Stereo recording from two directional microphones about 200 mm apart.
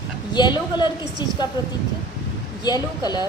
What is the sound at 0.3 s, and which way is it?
Speech, 20° left (ahead or behind).